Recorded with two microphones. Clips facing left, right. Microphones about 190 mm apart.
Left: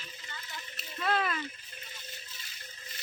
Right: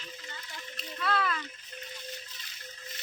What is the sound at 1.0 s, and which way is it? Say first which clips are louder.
Speech: even; 20° left (ahead or behind).